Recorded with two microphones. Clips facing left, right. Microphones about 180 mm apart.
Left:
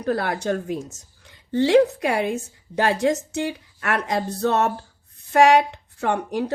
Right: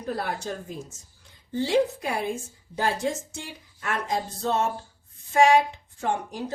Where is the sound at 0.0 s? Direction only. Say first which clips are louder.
Left 7 dB; 75° left (ahead or behind).